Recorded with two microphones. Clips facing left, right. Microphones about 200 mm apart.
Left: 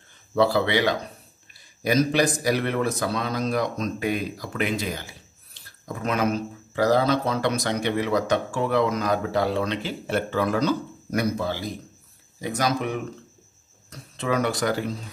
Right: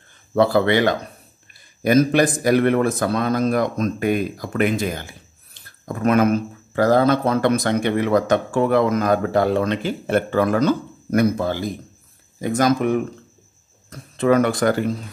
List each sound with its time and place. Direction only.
0.3 s a man's voice: 50° right (ahead or behind)